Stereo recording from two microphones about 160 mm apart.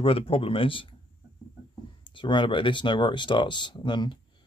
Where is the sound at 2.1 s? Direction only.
30° left (ahead or behind).